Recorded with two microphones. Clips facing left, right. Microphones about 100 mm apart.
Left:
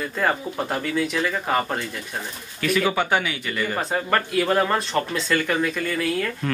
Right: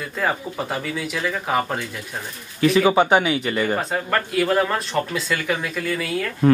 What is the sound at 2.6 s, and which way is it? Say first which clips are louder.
Speech: right 6 dB; 25° right (ahead or behind).